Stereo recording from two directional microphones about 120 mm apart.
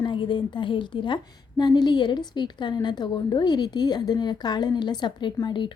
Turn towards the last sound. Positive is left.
turn(degrees=40)  # may be behind; listen again after turning